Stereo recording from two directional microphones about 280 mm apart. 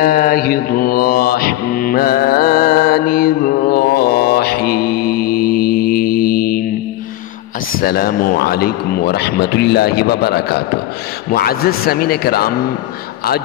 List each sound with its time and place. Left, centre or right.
0.0 s mantra: left
7.8 s a man's voice: left